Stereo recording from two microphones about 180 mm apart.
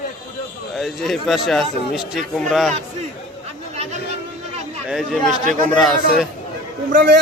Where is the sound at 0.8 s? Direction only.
Centre (ahead or behind).